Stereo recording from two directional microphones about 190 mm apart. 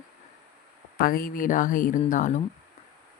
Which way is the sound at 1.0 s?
50° left (ahead or behind).